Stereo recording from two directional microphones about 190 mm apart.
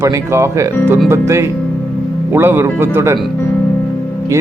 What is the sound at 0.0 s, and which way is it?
Speech, 15° right (ahead or behind).